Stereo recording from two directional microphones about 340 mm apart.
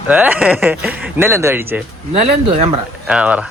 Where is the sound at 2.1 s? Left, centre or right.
Centre.